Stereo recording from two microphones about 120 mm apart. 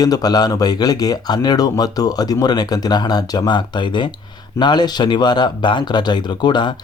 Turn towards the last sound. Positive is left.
turn(degrees=40)  # may be behind; listen again after turning